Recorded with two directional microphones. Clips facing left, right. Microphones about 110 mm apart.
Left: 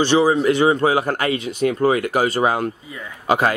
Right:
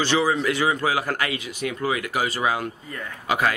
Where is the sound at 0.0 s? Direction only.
20° left (ahead or behind).